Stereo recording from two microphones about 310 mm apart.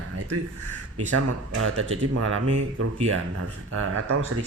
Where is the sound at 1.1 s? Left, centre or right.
Right.